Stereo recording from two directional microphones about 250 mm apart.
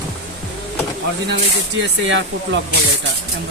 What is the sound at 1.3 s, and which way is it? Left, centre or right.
Speech, right.